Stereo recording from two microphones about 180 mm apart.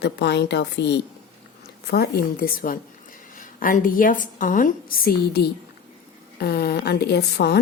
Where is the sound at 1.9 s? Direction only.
60° left (ahead or behind).